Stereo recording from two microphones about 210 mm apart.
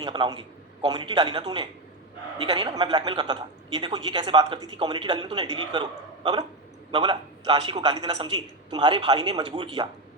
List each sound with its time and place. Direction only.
0.0 s a man's voice: 20° right (ahead or behind)